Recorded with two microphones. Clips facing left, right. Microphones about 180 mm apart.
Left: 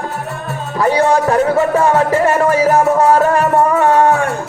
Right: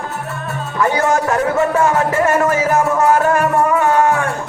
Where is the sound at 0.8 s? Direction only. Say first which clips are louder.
Left 3 dB; 35° left (ahead or behind).